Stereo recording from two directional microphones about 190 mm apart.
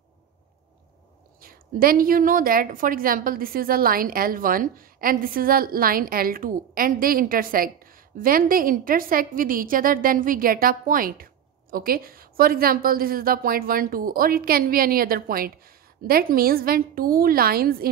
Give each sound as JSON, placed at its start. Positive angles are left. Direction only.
{"t": 1.4, "sound": "a woman's voice", "side_deg": -50}